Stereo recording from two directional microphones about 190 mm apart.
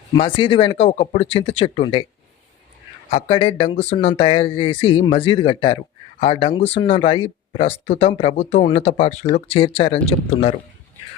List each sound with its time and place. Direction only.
0.1 s speech: 25° left (ahead or behind)
3.2 s speech: 25° left (ahead or behind)